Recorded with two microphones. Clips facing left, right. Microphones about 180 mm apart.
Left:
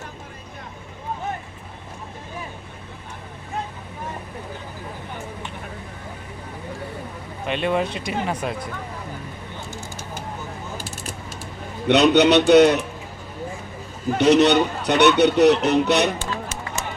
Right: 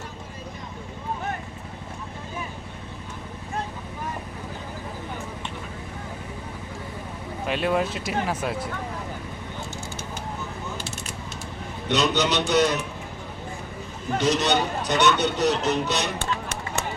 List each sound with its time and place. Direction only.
7.4 s speech: 5° right (ahead or behind)
11.9 s speech: 60° left (ahead or behind)
14.2 s speech: 60° left (ahead or behind)
16.1 s chop: 60° right (ahead or behind)